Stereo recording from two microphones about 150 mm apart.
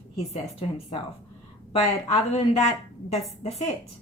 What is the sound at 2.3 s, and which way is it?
Speech, 40° left (ahead or behind).